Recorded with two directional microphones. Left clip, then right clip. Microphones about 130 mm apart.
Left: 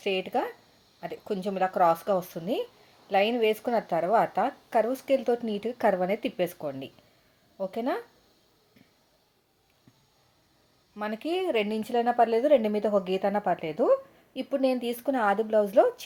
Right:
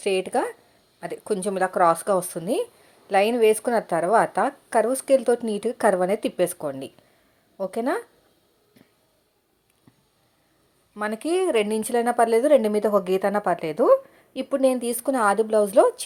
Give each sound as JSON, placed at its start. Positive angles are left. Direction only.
{"t": 0.0, "sound": "speech", "side_deg": -30}
{"t": 10.9, "sound": "speech", "side_deg": -35}